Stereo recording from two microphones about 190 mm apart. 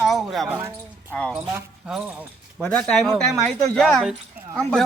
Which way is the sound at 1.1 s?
5° left (ahead or behind).